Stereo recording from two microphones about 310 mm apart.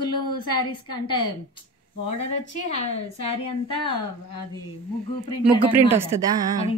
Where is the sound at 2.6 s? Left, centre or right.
Centre.